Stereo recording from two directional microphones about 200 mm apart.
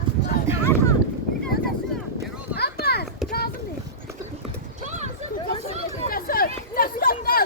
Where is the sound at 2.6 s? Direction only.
50° left (ahead or behind).